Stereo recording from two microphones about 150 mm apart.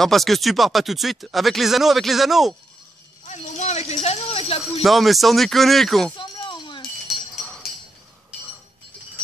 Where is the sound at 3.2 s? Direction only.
50° left (ahead or behind).